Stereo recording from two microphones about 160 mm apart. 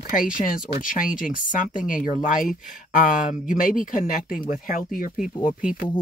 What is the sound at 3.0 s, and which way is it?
Speech, 55° left (ahead or behind).